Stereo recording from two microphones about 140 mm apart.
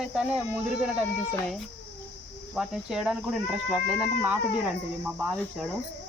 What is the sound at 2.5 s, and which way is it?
Speech, 5° right (ahead or behind).